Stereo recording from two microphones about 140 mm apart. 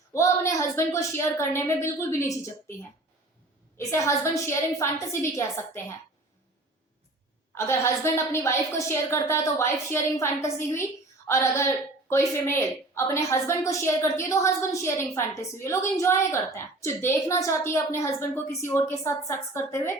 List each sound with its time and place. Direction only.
0.1 s a woman's voice: 20° left (ahead or behind)
3.8 s a woman's voice: 20° left (ahead or behind)
7.5 s a woman's voice: 20° left (ahead or behind)